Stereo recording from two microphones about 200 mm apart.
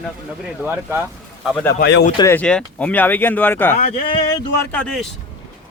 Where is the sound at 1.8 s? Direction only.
60° left (ahead or behind).